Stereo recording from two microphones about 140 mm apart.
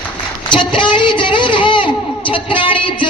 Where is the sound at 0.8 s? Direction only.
35° left (ahead or behind).